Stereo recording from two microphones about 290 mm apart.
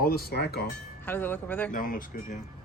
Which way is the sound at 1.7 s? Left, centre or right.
Left.